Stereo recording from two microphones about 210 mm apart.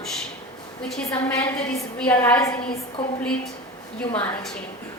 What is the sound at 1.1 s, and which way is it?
A woman's voice, 10° left (ahead or behind).